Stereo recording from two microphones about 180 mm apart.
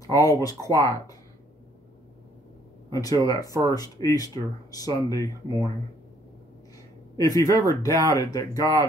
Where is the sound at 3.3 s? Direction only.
20° left (ahead or behind).